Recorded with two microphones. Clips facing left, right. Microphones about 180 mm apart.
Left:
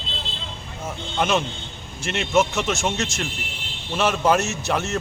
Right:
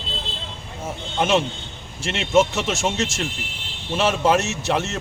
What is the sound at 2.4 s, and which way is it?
Speech, 5° right (ahead or behind).